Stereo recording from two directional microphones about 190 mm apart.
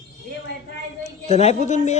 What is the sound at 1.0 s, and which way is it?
Speech, 35° left (ahead or behind).